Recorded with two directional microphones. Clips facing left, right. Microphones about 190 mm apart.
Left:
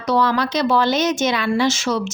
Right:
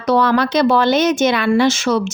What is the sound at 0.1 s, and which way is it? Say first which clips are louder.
Speech: right 4 dB; 60° right (ahead or behind).